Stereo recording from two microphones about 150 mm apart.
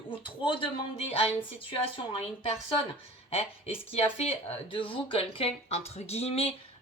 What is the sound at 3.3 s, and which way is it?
Speech, 40° left (ahead or behind).